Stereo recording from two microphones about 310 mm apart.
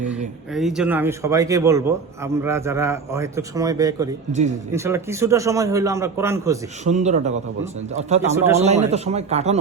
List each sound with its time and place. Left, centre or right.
0.5 s a man's voice: centre
4.3 s a man's voice: right
4.7 s a man's voice: centre
6.8 s a man's voice: right